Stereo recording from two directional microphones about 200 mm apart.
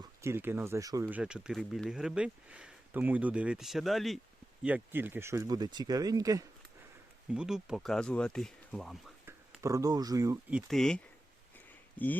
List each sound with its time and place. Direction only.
0.0 s speech: 15° right (ahead or behind)
1.0 s speech: 5° right (ahead or behind)
7.3 s speech: 5° right (ahead or behind)
9.2 s speech: 10° right (ahead or behind)
10.7 s speech: centre (ahead or behind)